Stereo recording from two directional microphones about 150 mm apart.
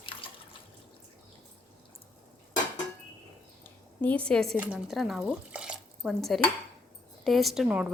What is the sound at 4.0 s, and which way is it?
Speech, 10° left (ahead or behind).